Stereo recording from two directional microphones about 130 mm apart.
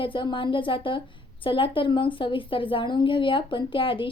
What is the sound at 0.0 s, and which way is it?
A woman's voice, 40° left (ahead or behind).